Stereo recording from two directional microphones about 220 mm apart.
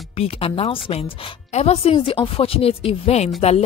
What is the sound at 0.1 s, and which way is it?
Speech, 25° left (ahead or behind).